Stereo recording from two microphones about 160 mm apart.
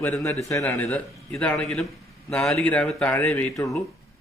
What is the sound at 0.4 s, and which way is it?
A man's voice, 20° left (ahead or behind).